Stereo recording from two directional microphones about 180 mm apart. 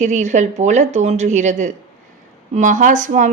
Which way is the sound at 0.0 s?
40° right (ahead or behind).